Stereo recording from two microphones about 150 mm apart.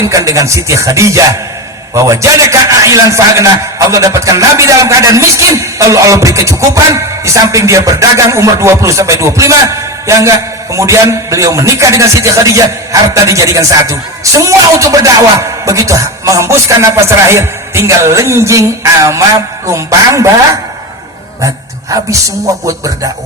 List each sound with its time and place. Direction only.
0.1 s a man's voice: 20° right (ahead or behind)